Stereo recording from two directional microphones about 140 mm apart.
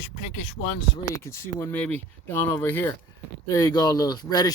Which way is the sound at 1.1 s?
20° left (ahead or behind).